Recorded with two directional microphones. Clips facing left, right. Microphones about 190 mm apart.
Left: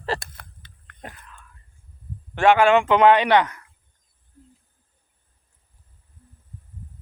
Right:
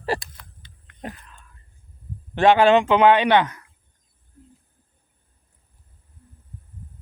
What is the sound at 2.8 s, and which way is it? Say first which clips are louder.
Speech: even; 20° right (ahead or behind).